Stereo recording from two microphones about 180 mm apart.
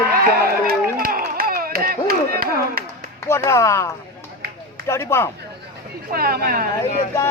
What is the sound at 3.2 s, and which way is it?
Speech, 15° left (ahead or behind).